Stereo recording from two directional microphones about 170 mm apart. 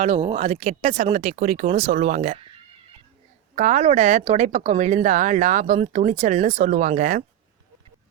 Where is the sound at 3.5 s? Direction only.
45° right (ahead or behind).